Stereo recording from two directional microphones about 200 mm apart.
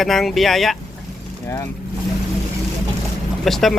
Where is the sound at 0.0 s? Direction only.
Centre (ahead or behind).